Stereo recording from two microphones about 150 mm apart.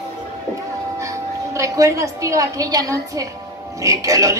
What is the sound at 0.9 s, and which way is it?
A woman's voice, 20° right (ahead or behind).